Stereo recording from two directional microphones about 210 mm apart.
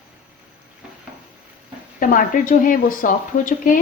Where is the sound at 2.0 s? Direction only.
40° left (ahead or behind).